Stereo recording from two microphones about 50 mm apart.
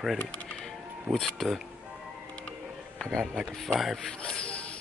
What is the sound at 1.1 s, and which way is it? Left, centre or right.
Speech, right.